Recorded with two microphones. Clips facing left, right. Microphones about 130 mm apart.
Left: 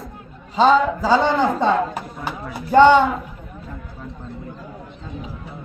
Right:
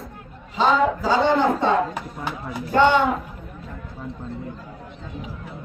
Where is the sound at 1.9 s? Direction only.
5° left (ahead or behind).